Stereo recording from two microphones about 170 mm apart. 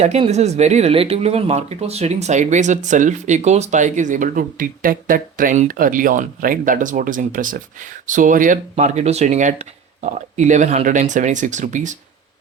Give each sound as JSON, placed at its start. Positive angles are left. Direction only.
{"t": 0.0, "sound": "speech", "side_deg": -40}
{"t": 8.7, "sound": "speech", "side_deg": -40}